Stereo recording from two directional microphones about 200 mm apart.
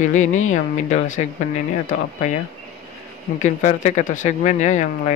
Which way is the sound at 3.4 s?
40° left (ahead or behind).